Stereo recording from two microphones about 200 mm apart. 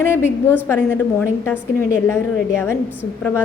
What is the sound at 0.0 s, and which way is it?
A woman's voice, 10° left (ahead or behind).